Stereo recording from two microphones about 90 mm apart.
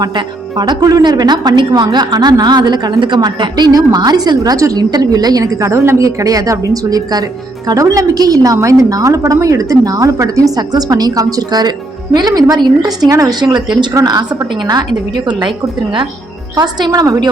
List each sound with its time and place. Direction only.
0.6 s a woman's voice: 45° right (ahead or behind)
4.4 s a woman's voice: 40° right (ahead or behind)
5.6 s a woman's voice: 30° right (ahead or behind)
13.4 s a woman's voice: 50° right (ahead or behind)
15.3 s a woman's voice: 55° right (ahead or behind)
16.6 s a woman's voice: 50° right (ahead or behind)